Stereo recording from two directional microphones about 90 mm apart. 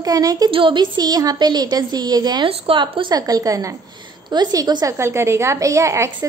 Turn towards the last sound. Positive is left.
turn(degrees=-30)  # may be behind; listen again after turning